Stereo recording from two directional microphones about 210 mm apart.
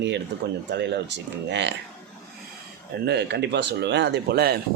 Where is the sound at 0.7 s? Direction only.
55° right (ahead or behind).